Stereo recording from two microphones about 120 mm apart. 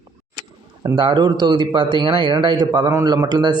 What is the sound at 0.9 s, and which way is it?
Speech, 40° right (ahead or behind).